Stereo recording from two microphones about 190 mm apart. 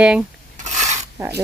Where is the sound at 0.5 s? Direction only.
40° right (ahead or behind).